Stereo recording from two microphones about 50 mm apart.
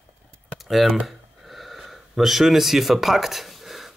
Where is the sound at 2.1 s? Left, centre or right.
Centre.